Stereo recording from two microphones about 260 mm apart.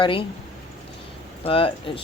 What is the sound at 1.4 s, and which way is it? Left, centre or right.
Speech, left.